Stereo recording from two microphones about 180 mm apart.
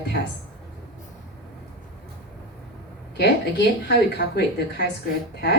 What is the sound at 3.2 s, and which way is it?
A woman's voice, 70° left (ahead or behind).